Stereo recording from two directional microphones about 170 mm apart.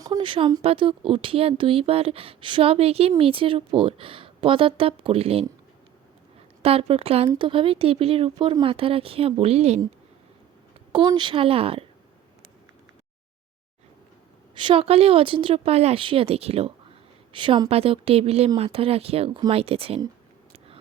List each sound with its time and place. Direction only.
0.0 s speech: 25° right (ahead or behind)
6.6 s speech: 35° right (ahead or behind)
10.9 s speech: 25° right (ahead or behind)
14.5 s speech: 30° right (ahead or behind)